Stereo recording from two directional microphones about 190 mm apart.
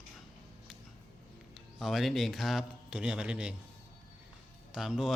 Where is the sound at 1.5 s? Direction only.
Centre (ahead or behind).